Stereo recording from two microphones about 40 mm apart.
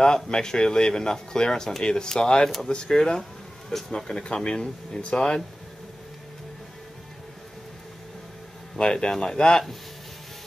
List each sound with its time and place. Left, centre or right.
0.0 s speech: centre
8.7 s speech: left